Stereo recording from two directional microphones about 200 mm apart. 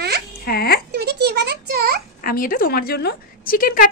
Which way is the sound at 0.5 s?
50° left (ahead or behind).